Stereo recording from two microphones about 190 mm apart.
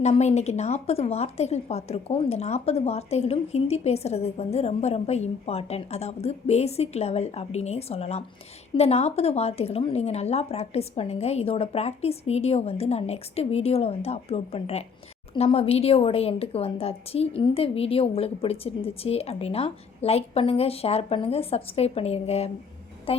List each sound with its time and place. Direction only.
0.0 s a woman's voice: 35° left (ahead or behind)